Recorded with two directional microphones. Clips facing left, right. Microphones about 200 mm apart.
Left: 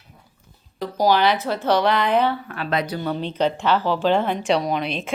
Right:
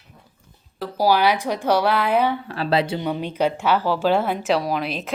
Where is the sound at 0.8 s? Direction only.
5° right (ahead or behind).